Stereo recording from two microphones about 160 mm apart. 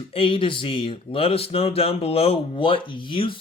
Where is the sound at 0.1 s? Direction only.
35° left (ahead or behind).